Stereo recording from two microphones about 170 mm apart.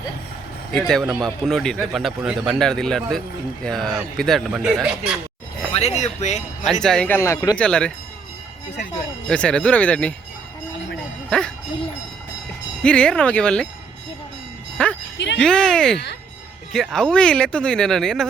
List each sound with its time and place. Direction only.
0.7 s speech: 5° left (ahead or behind)
5.7 s speech: 40° left (ahead or behind)
6.8 s speech: 5° left (ahead or behind)
7.6 s speech: 5° left (ahead or behind)
9.3 s speech: 5° left (ahead or behind)
11.3 s speech: 5° left (ahead or behind)
12.8 s speech: 5° left (ahead or behind)
14.8 s speech: 5° left (ahead or behind)